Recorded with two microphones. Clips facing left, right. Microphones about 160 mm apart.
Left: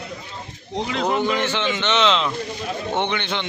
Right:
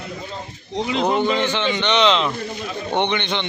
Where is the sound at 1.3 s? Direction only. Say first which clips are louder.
Right 2 dB; 5° left (ahead or behind).